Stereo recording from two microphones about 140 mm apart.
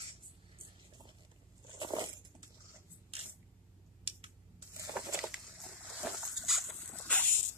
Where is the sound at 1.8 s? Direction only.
30° right (ahead or behind).